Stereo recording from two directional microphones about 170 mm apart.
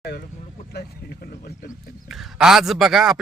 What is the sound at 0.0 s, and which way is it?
Vehicle, 70° left (ahead or behind).